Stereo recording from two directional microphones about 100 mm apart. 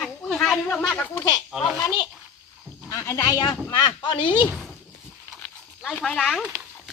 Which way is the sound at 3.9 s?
55° left (ahead or behind).